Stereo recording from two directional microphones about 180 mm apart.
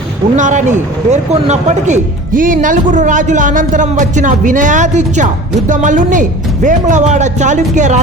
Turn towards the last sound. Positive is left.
turn(degrees=-40)  # may be behind; listen again after turning